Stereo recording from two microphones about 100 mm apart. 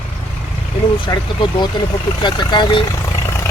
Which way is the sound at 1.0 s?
50° left (ahead or behind).